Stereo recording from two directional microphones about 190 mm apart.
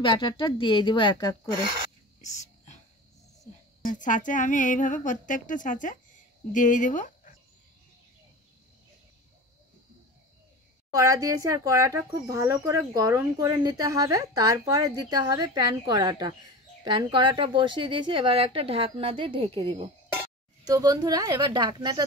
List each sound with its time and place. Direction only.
0.0 s speech: 25° left (ahead or behind)
2.2 s whispering: 40° left (ahead or behind)
3.8 s speech: 45° left (ahead or behind)
10.9 s a woman's voice: 15° right (ahead or behind)